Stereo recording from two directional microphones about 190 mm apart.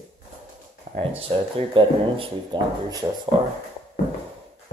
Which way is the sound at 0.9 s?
40° right (ahead or behind).